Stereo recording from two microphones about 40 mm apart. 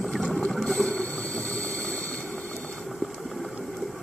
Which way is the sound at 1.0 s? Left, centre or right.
Left.